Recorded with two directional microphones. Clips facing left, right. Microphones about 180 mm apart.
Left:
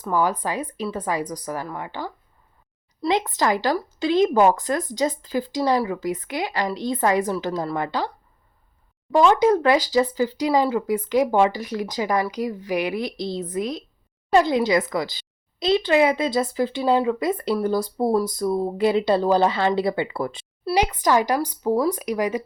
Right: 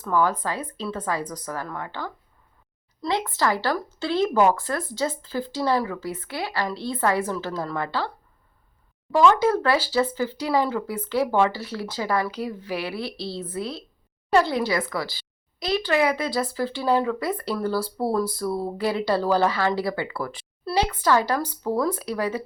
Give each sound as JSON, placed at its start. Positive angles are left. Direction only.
{"t": 0.0, "sound": "speech", "side_deg": 15}
{"t": 9.1, "sound": "a woman's voice", "side_deg": 20}